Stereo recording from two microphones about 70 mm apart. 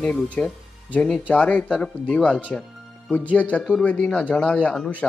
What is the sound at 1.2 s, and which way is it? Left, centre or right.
A man's voice, centre.